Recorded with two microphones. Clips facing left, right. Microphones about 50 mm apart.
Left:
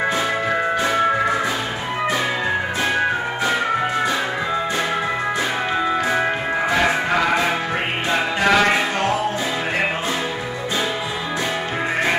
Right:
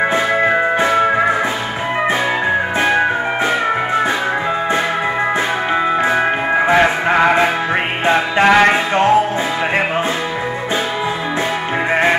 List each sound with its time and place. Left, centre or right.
0.4 s music: right
6.0 s music: right